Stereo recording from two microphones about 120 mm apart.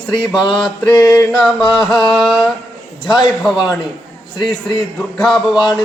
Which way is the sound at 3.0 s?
35° left (ahead or behind).